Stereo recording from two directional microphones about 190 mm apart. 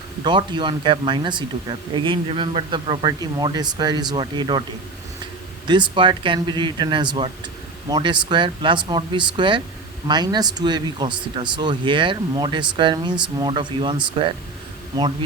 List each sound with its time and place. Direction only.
0.3 s speech: 25° right (ahead or behind)
5.6 s speech: 25° right (ahead or behind)